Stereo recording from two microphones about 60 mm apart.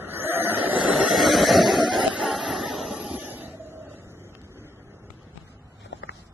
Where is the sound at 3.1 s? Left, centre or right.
Right.